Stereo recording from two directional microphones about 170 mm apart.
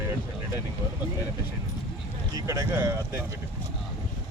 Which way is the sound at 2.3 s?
20° right (ahead or behind).